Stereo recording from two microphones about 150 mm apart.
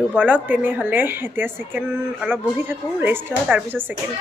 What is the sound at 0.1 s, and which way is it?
A woman's voice, 10° right (ahead or behind).